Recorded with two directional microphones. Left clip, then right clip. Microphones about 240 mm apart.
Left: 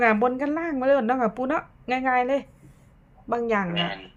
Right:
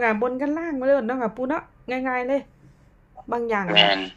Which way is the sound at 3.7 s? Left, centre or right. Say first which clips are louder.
Right 11 dB; right.